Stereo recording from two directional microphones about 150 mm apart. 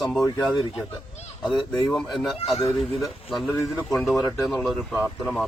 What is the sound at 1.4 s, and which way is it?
Speech, centre (ahead or behind).